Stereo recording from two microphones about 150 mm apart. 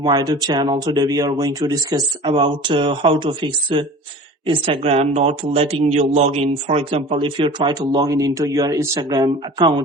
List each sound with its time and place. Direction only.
0.0 s speech: 30° right (ahead or behind)
7.9 s speech: 20° right (ahead or behind)